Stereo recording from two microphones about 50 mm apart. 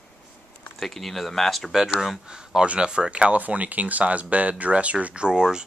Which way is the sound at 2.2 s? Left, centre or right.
Centre.